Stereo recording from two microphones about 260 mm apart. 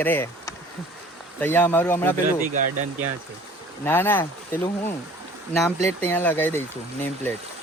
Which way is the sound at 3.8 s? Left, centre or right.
Centre.